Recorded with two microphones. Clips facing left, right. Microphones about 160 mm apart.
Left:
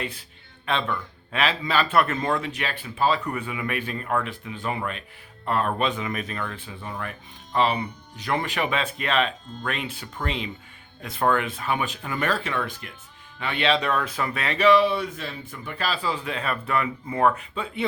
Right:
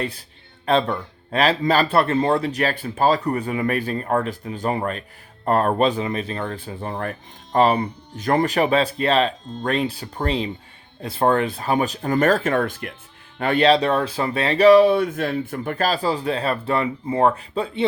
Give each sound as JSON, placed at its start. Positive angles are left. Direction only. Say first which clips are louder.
{"t": 0.0, "sound": "speech", "louder": "right 5 dB", "side_deg": -40}